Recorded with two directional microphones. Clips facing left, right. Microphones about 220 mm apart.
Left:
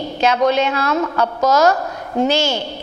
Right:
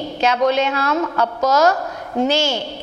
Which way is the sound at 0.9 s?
25° left (ahead or behind).